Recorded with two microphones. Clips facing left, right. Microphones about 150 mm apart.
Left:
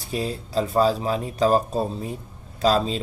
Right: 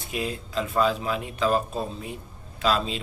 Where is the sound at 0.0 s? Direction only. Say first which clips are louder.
Left 3 dB; 35° left (ahead or behind).